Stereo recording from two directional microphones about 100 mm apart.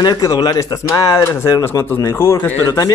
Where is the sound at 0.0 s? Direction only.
40° left (ahead or behind).